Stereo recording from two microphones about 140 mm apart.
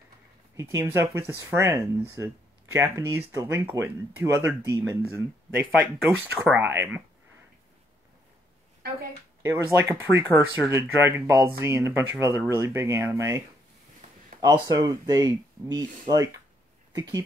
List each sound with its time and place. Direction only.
0.6 s speech: 20° right (ahead or behind)
9.4 s speech: 20° right (ahead or behind)
14.4 s speech: 30° right (ahead or behind)